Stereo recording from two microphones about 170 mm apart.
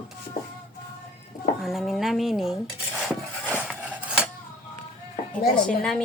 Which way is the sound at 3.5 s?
10° right (ahead or behind).